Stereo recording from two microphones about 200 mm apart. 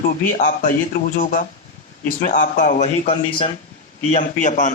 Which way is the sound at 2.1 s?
40° left (ahead or behind).